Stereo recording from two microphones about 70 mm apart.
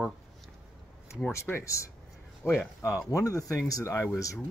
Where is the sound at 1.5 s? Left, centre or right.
Left.